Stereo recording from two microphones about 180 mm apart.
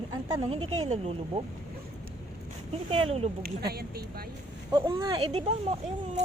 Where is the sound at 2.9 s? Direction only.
35° right (ahead or behind).